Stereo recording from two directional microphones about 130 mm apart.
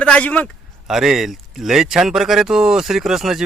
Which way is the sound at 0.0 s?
10° left (ahead or behind).